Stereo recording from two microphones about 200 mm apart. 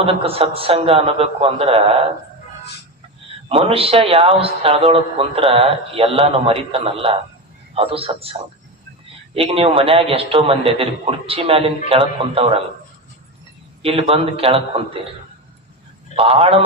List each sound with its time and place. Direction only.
0.0 s a man's voice: 30° right (ahead or behind)
3.5 s a man's voice: 25° right (ahead or behind)
13.8 s a man's voice: 30° right (ahead or behind)
16.1 s a man's voice: 25° right (ahead or behind)